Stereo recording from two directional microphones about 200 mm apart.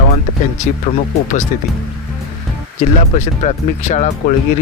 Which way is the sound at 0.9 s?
40° left (ahead or behind).